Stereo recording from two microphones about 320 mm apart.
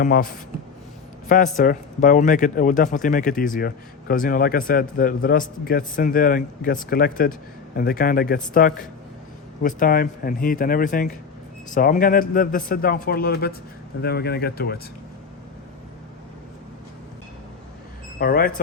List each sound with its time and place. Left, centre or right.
0.0 s a man's voice: left
1.5 s a man's voice: left
18.2 s a man's voice: left